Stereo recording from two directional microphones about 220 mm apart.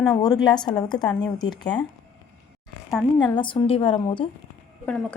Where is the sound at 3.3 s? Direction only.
20° left (ahead or behind).